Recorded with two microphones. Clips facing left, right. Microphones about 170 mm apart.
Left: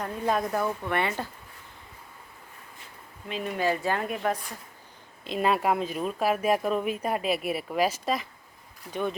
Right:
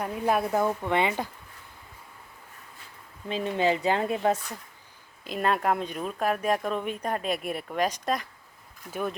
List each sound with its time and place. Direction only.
0.0 s speech: 10° right (ahead or behind)
3.2 s speech: 30° right (ahead or behind)
5.2 s speech: centre (ahead or behind)